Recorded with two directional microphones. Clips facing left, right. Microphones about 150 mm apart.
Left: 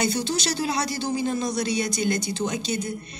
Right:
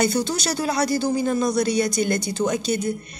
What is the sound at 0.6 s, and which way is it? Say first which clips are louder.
Speech: right 5 dB; 45° right (ahead or behind).